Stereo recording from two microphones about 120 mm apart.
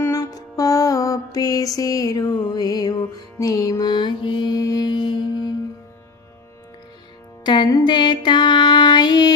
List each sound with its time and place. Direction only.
0.0 s music: 25° left (ahead or behind)
7.4 s music: 35° left (ahead or behind)